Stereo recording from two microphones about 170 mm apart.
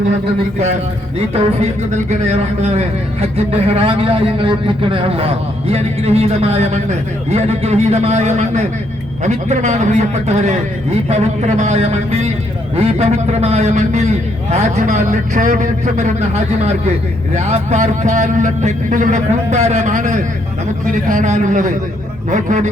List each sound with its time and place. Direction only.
1.9 s a man's voice: 40° right (ahead or behind)